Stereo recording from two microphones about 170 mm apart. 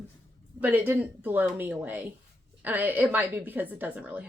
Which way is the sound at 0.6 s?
10° right (ahead or behind).